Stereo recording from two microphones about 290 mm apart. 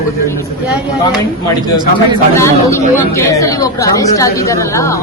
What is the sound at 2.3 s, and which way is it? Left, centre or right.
Speech, centre.